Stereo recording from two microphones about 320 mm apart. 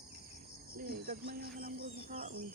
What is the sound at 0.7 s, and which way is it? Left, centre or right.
Speech, right.